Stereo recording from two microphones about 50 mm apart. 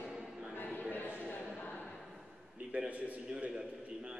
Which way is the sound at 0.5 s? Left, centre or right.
Left.